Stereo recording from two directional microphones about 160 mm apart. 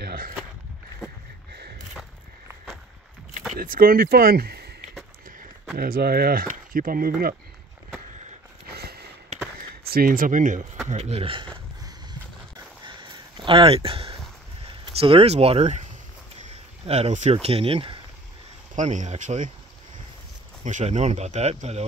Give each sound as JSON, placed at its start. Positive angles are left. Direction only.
{"t": 0.0, "sound": "a sound", "side_deg": -65}
{"t": 3.5, "sound": "speech", "side_deg": -65}
{"t": 5.8, "sound": "speech", "side_deg": -70}
{"t": 8.7, "sound": "sniff", "side_deg": -80}
{"t": 9.6, "sound": "speech", "side_deg": -70}
{"t": 10.9, "sound": "speech", "side_deg": -40}
{"t": 11.5, "sound": "a sound", "side_deg": -25}
{"t": 13.5, "sound": "speech", "side_deg": -35}
{"t": 18.8, "sound": "speech", "side_deg": -50}
{"t": 20.6, "sound": "speech", "side_deg": -50}